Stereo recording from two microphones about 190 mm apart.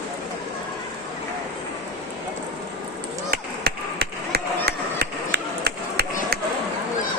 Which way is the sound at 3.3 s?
55° right (ahead or behind).